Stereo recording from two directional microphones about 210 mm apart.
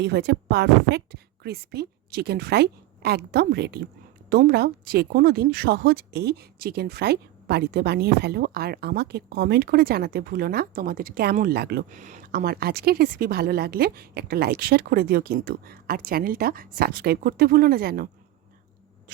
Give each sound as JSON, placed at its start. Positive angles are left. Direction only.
{"t": 0.0, "sound": "a woman's voice", "side_deg": -50}